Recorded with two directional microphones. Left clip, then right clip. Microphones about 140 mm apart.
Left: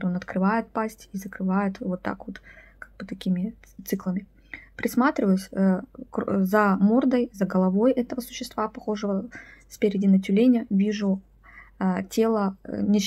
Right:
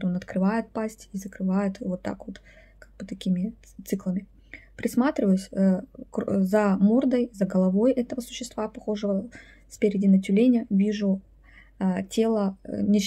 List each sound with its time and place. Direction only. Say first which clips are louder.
0.0 s speech: left 2 dB; 25° right (ahead or behind)